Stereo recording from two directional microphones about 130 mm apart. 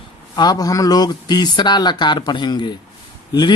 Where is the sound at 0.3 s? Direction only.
30° left (ahead or behind).